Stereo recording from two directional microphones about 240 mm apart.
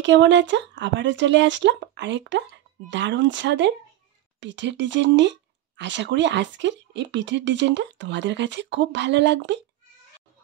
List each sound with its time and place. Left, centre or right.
0.0 s speech: right